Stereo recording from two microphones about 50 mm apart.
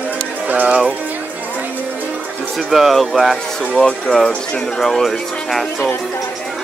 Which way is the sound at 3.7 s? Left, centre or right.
Centre.